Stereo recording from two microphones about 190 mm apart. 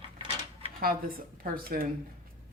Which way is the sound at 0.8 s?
50° right (ahead or behind).